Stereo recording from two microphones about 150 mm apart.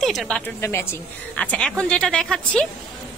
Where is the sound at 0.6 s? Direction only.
15° left (ahead or behind).